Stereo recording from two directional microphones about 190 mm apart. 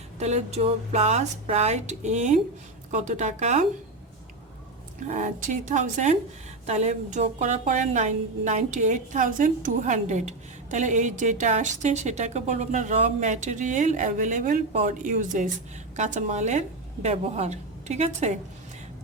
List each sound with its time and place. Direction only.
0.2 s a woman's voice: 35° right (ahead or behind)
4.9 s a woman's voice: 40° right (ahead or behind)